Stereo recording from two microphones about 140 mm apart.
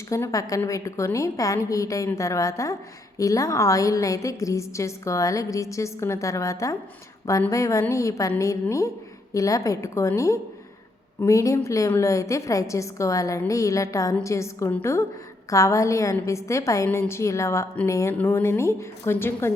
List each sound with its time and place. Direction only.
0.1 s a woman's voice: 25° left (ahead or behind)